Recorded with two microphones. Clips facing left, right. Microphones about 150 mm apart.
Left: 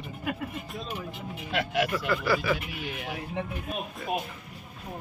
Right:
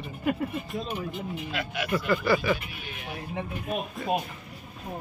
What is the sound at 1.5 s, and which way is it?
Speech, 90° left.